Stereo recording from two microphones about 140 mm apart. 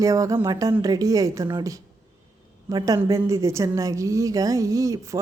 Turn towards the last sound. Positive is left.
turn(degrees=-25)  # may be behind; listen again after turning